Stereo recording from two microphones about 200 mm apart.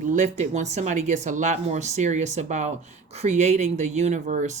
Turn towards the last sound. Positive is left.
turn(degrees=-40)  # may be behind; listen again after turning